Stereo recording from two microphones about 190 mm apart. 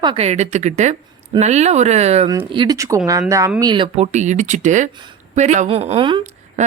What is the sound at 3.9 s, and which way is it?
Speech, 35° right (ahead or behind).